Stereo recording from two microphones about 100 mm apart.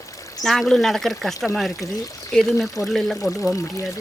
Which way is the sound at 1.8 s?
35° left (ahead or behind).